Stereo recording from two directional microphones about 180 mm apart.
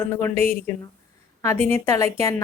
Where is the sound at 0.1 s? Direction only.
10° left (ahead or behind).